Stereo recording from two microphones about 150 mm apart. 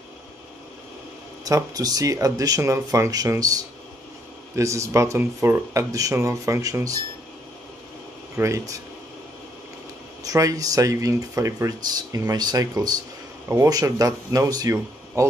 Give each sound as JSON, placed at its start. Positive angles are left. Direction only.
{"t": 1.4, "sound": "speech", "side_deg": -25}
{"t": 8.4, "sound": "speech", "side_deg": -20}
{"t": 10.2, "sound": "speech", "side_deg": -25}